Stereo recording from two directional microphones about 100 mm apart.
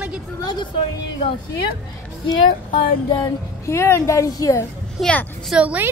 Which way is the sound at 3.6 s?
25° left (ahead or behind).